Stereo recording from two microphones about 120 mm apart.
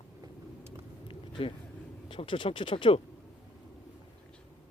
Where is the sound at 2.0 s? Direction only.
45° left (ahead or behind).